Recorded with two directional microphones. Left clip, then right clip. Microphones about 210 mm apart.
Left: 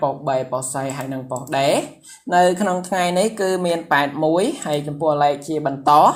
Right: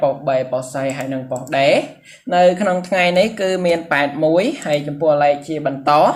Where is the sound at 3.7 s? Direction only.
10° left (ahead or behind).